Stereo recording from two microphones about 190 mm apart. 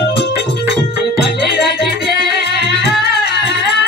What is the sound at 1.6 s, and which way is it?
Music, 60° left (ahead or behind).